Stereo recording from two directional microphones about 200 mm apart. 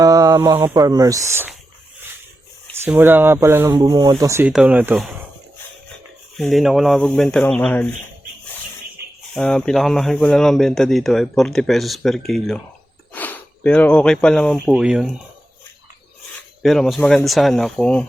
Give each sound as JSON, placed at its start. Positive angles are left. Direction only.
{"t": 0.0, "sound": "speech", "side_deg": -20}
{"t": 2.8, "sound": "speech", "side_deg": -10}
{"t": 6.3, "sound": "speech", "side_deg": 0}
{"t": 9.3, "sound": "speech", "side_deg": 5}
{"t": 16.6, "sound": "speech", "side_deg": 0}